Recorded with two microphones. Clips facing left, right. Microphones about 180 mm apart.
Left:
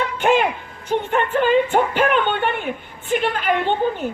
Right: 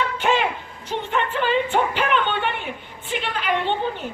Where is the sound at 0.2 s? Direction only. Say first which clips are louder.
Left 6 dB; 50° left (ahead or behind).